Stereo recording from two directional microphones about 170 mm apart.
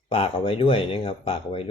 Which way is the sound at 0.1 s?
35° left (ahead or behind).